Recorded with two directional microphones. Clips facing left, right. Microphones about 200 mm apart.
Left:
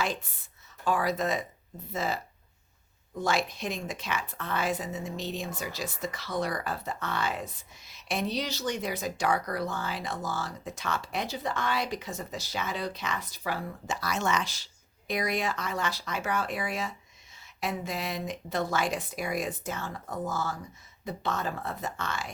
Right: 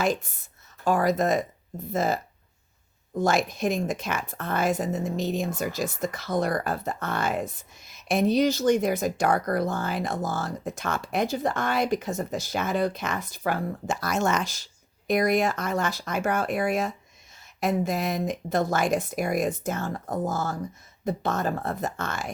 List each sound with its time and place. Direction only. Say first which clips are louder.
0.0 s a woman's voice: right 6 dB; 45° right (ahead or behind)
3.2 s a woman's voice: right 5 dB; 45° right (ahead or behind)